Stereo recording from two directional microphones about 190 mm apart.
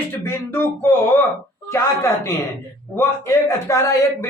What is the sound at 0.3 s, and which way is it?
A man's voice, 10° left (ahead or behind).